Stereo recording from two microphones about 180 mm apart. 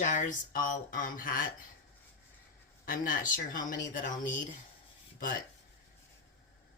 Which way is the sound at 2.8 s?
50° left (ahead or behind).